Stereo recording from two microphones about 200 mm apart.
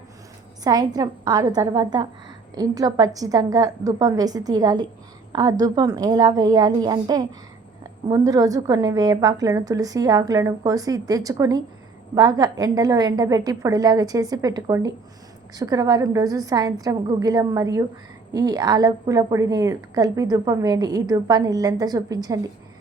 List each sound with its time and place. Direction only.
0.6 s a woman's voice: 20° right (ahead or behind)